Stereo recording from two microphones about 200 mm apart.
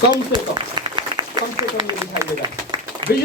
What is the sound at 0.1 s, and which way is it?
A man's voice, 20° right (ahead or behind).